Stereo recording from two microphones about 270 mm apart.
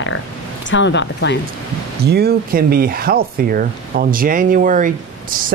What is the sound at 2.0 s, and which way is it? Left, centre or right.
Speech, right.